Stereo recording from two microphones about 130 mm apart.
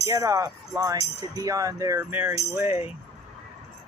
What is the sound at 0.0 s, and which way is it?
Speech, 25° right (ahead or behind).